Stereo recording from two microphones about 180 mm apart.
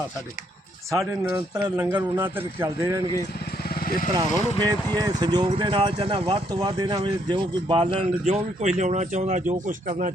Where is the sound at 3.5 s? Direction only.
55° left (ahead or behind).